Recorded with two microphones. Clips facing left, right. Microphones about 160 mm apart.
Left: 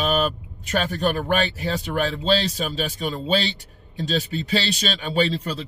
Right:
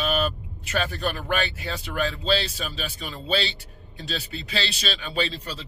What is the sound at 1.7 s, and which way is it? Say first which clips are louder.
Speech: left 6 dB; 45° left (ahead or behind).